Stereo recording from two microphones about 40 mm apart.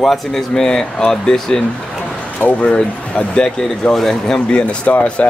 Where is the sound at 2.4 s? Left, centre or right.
Left.